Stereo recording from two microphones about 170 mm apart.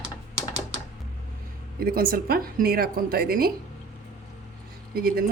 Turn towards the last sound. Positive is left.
turn(degrees=-60)  # may be behind; listen again after turning